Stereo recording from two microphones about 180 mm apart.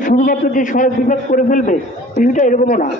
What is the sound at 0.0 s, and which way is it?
A man's voice, 45° left (ahead or behind).